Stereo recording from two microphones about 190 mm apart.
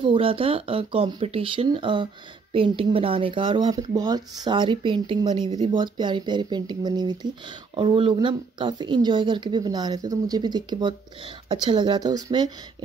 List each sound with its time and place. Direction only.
0.0 s speech: 30° right (ahead or behind)